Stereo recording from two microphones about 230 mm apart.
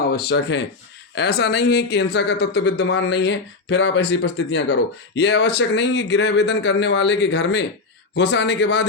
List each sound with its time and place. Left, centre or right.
0.1 s speech: left